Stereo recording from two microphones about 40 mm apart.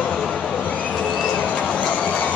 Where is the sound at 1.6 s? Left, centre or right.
Left.